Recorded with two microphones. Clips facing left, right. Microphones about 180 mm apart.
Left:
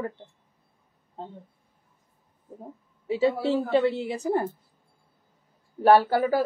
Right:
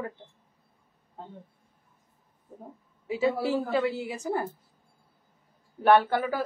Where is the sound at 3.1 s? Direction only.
30° left (ahead or behind).